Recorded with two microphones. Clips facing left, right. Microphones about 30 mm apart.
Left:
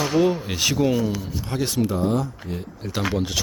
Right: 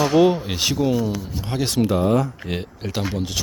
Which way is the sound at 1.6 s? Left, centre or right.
Right.